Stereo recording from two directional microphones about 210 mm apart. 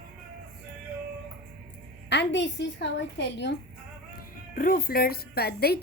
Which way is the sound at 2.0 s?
55° left (ahead or behind).